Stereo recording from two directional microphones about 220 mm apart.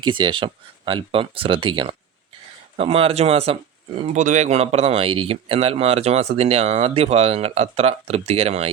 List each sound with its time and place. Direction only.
0.0 s speech: 20° right (ahead or behind)